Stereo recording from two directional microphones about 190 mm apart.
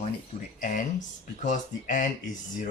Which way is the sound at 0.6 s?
40° left (ahead or behind).